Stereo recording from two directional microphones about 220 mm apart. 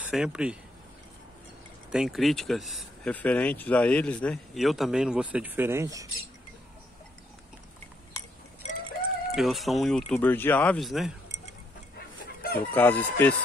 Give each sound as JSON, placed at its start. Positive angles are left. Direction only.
{"t": 0.0, "sound": "speech", "side_deg": -5}
{"t": 1.9, "sound": "speech", "side_deg": 0}
{"t": 9.3, "sound": "speech", "side_deg": 0}
{"t": 12.4, "sound": "chicken", "side_deg": 45}
{"t": 12.7, "sound": "chicken", "side_deg": 10}